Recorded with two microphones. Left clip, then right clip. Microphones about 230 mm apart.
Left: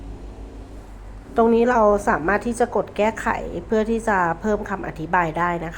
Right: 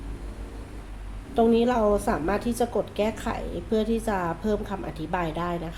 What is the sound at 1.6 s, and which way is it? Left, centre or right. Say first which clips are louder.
A woman's voice: left 6 dB; centre.